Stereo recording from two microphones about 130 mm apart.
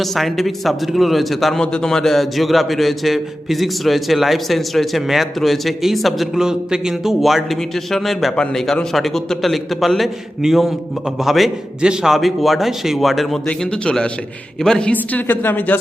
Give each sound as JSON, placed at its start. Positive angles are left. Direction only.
{"t": 0.0, "sound": "a woman's voice", "side_deg": 0}